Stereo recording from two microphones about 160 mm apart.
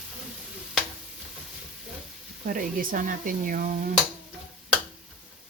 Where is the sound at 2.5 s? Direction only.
60° right (ahead or behind).